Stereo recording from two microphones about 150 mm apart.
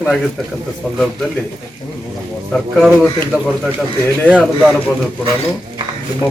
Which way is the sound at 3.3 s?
5° right (ahead or behind).